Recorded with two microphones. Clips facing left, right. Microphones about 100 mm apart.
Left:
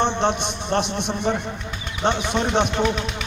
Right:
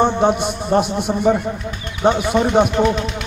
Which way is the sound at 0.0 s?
10° right (ahead or behind).